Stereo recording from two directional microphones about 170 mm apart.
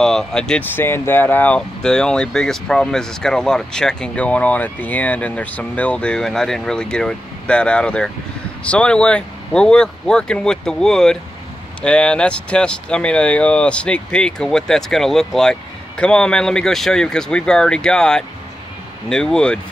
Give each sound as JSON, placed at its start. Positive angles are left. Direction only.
{"t": 0.0, "sound": "speech", "side_deg": 5}